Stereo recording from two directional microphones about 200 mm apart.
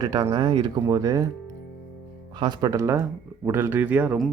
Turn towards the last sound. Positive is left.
turn(degrees=-5)  # may be behind; listen again after turning